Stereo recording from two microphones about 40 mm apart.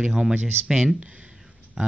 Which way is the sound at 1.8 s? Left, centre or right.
Centre.